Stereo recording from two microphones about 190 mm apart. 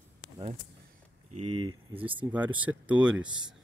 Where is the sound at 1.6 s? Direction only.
25° right (ahead or behind).